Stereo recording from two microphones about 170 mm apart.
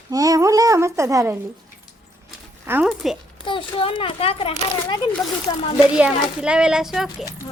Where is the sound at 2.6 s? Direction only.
10° right (ahead or behind).